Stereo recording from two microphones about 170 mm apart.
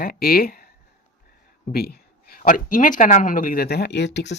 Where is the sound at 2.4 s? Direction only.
50° left (ahead or behind); by 4.3 s 90° left.